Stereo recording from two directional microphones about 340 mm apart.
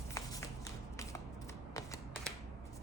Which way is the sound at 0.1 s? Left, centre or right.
Centre.